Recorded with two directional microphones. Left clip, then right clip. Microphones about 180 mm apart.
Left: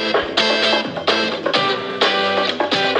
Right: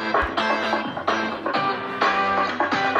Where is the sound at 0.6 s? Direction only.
55° left (ahead or behind).